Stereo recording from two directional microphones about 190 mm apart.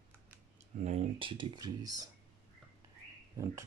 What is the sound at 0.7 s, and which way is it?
Speech, 35° right (ahead or behind).